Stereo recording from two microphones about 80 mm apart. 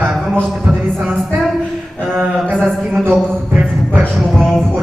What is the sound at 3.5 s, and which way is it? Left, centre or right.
Music, centre.